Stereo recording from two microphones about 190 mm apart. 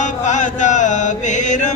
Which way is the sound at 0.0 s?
40° left (ahead or behind).